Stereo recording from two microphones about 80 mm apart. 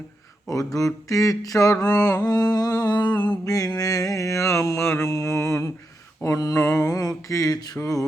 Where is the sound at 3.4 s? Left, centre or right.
Left.